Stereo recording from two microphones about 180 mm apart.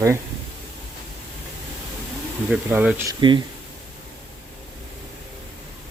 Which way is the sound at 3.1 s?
25° right (ahead or behind).